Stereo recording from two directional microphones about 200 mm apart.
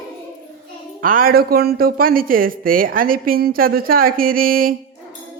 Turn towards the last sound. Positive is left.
turn(degrees=-45)  # may be behind; listen again after turning